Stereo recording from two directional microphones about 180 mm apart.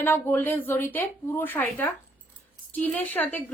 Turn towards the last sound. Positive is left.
turn(degrees=10)  # may be behind; listen again after turning